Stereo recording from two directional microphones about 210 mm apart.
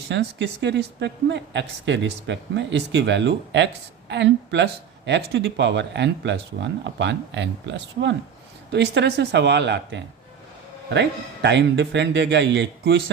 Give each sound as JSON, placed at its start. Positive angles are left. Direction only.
{"t": 0.1, "sound": "a woman's voice", "side_deg": -55}
{"t": 11.4, "sound": "a woman's voice", "side_deg": -55}